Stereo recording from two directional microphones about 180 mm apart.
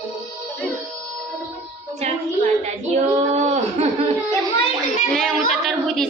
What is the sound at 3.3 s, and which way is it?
Laughter, 35° right (ahead or behind).